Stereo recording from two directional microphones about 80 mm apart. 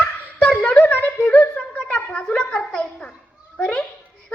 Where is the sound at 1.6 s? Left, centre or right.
Centre.